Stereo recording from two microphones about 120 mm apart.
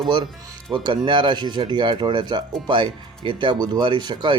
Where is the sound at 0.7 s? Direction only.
40° right (ahead or behind).